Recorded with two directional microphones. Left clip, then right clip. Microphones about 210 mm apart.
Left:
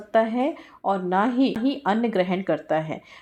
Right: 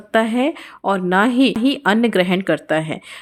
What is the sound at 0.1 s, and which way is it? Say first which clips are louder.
Speech: right 4 dB; 30° right (ahead or behind).